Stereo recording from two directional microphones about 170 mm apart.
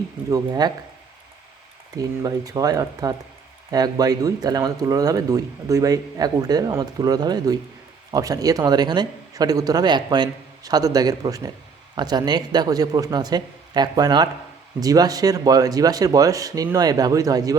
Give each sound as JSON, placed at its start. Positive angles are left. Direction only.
{"t": 0.3, "sound": "speech", "side_deg": -20}
{"t": 2.0, "sound": "speech", "side_deg": -20}